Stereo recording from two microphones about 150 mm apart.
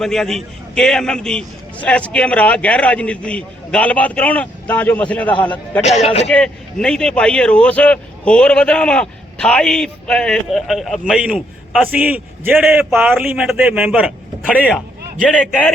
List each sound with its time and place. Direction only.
0.0 s a man's voice: 5° left (ahead or behind)
5.8 s speech: 45° left (ahead or behind)
6.3 s a man's voice: 5° left (ahead or behind)